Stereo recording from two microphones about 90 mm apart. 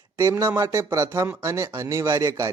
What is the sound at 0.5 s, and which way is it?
A man's voice, 30° right (ahead or behind).